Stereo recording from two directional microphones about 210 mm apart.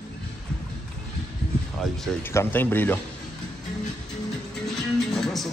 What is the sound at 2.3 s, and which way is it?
Speech, 10° left (ahead or behind).